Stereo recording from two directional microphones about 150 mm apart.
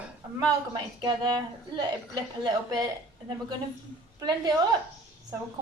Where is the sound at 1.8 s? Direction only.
25° right (ahead or behind).